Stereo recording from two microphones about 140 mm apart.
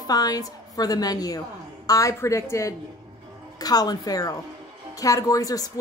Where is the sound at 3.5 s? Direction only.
25° left (ahead or behind).